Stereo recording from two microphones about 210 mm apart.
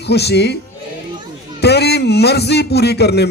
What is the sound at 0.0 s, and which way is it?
Speech, 50° left (ahead or behind).